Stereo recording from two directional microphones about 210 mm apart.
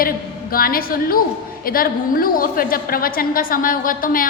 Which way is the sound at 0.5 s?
45° left (ahead or behind).